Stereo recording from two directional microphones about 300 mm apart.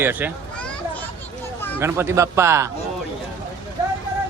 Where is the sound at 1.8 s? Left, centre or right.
Centre.